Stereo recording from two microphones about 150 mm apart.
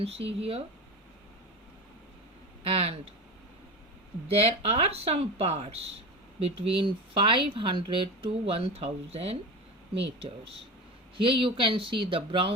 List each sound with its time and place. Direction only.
0.0 s speech: 40° right (ahead or behind)
2.6 s speech: 40° right (ahead or behind)
4.3 s speech: 40° right (ahead or behind)